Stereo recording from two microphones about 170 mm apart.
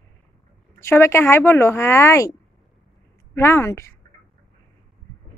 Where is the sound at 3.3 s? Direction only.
15° left (ahead or behind).